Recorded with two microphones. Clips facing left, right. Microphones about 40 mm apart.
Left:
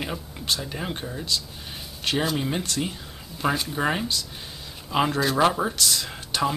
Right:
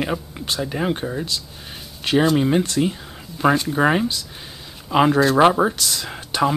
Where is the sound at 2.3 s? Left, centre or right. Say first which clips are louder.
Right 9 dB; centre.